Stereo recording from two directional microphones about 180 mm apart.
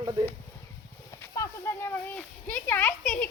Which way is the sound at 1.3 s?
15° left (ahead or behind).